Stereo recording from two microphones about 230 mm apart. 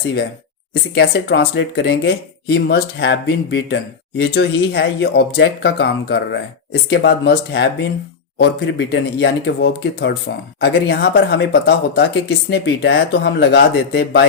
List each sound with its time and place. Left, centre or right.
0.7 s speech: left